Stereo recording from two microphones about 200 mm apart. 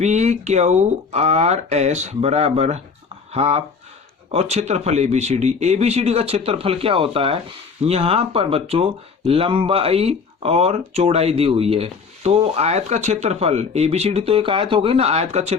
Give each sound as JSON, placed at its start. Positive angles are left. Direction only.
{"t": 0.0, "sound": "speech", "side_deg": -35}